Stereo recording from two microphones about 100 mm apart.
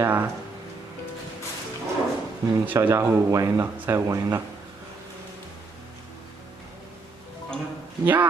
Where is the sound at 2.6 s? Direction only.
15° right (ahead or behind).